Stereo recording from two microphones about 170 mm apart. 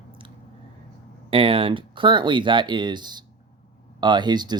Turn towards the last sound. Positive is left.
turn(degrees=-25)  # may be behind; listen again after turning